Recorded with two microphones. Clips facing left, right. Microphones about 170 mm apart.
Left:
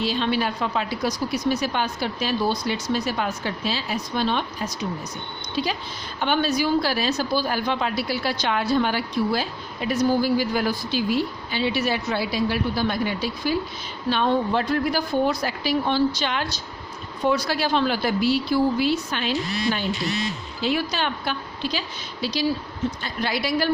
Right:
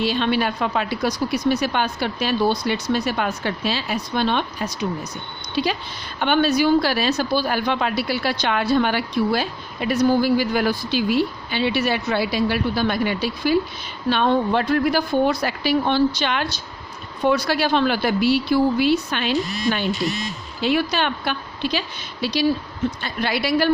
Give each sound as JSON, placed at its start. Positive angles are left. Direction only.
{"t": 0.0, "sound": "speech", "side_deg": -65}